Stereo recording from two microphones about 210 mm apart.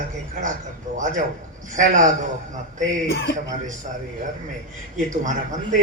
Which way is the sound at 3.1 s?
55° left (ahead or behind).